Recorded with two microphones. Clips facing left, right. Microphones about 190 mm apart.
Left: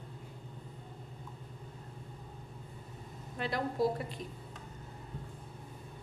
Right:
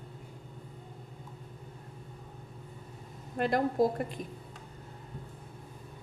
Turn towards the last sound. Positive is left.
turn(degrees=-50)  # may be behind; listen again after turning